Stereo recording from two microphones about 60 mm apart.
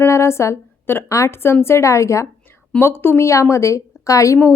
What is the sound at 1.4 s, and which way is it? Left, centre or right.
Speech, left.